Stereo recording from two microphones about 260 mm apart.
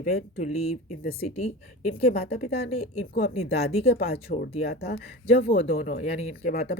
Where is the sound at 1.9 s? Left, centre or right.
Left.